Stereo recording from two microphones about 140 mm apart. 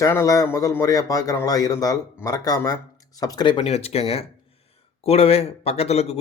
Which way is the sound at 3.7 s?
45° left (ahead or behind).